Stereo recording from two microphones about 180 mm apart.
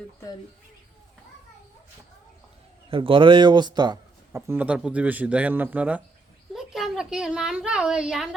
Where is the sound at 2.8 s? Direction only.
30° right (ahead or behind).